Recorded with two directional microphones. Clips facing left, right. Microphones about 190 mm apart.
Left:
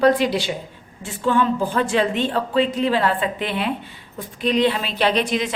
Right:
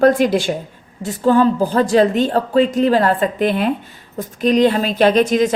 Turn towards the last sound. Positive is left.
turn(degrees=-45)  # may be behind; listen again after turning